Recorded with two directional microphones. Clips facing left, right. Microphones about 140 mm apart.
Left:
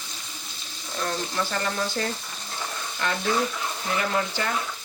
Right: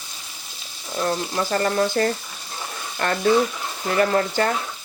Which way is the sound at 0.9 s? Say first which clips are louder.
Right 5 dB; 35° right (ahead or behind).